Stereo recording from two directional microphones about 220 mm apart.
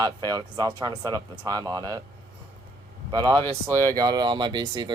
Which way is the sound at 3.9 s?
15° right (ahead or behind).